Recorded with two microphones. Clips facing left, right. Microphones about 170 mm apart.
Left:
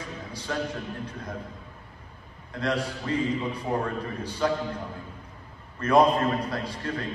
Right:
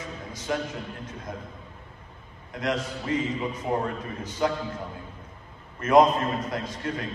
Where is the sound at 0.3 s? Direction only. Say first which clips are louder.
Right 5 dB; 20° right (ahead or behind).